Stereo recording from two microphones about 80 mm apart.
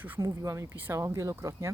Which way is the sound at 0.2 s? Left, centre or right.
Right.